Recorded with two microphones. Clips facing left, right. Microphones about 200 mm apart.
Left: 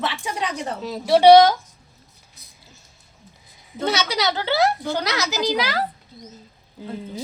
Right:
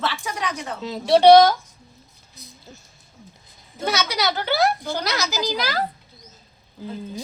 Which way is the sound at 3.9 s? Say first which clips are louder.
Left 1 dB; 25° left (ahead or behind).